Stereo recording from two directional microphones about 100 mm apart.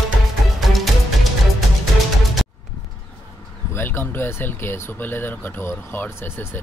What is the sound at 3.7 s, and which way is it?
Speech, 20° left (ahead or behind).